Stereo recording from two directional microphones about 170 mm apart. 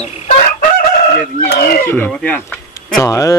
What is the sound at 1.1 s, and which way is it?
Speech, 60° left (ahead or behind).